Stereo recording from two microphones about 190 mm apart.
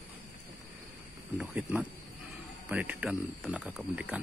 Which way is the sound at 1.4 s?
5° right (ahead or behind).